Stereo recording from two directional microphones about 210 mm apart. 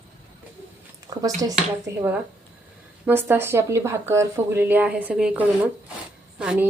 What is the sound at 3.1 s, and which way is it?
Speech, 10° right (ahead or behind).